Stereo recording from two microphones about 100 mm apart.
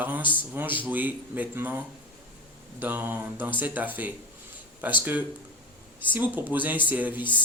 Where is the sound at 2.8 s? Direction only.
20° right (ahead or behind).